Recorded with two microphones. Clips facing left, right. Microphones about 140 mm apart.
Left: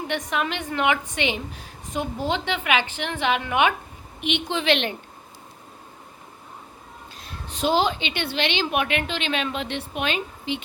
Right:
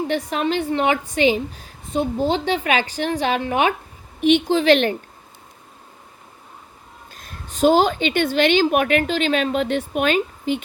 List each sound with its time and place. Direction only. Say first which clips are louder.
0.1 s a woman's voice: right 5 dB; 35° right (ahead or behind)
7.2 s a woman's voice: right 9 dB; 45° right (ahead or behind)